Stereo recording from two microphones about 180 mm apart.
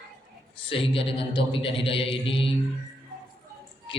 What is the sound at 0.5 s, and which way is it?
A man's voice, 30° left (ahead or behind).